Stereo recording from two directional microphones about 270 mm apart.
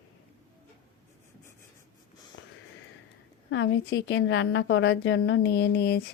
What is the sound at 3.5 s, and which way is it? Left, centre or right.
A woman's voice, left.